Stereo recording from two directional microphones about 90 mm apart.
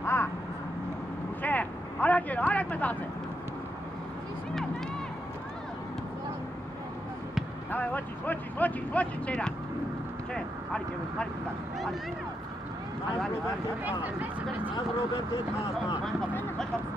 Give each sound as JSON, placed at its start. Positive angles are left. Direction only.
{"t": 0.0, "sound": "vehicle", "side_deg": 30}
{"t": 1.4, "sound": "vehicle", "side_deg": 20}
{"t": 7.7, "sound": "speech", "side_deg": 20}
{"t": 14.0, "sound": "speech", "side_deg": -20}